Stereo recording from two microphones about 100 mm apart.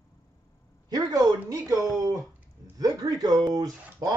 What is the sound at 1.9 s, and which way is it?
Speech, 35° right (ahead or behind).